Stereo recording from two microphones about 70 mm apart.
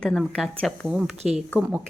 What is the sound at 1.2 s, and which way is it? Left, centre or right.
Speech, centre.